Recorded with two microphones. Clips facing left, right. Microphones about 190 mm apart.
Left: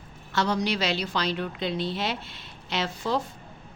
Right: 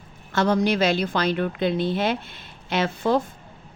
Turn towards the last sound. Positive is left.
turn(degrees=-55)  # may be behind; listen again after turning